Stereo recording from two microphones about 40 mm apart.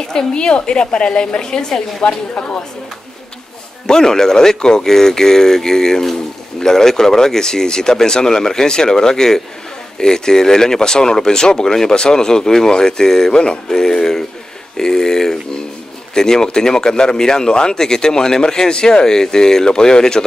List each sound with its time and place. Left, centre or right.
0.1 s a woman's voice: centre
3.8 s speech: centre